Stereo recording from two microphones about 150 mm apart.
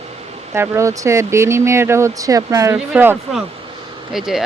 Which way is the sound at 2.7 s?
10° right (ahead or behind).